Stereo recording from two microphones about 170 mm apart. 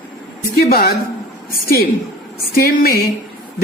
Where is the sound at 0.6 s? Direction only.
60° left (ahead or behind).